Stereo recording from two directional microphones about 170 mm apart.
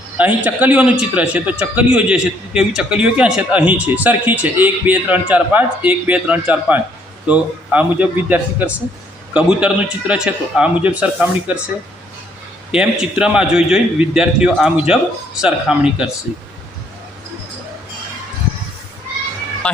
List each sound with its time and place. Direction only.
0.2 s a man's voice: 10° right (ahead or behind)
12.7 s a man's voice: 5° right (ahead or behind)
19.6 s speech: 5° left (ahead or behind)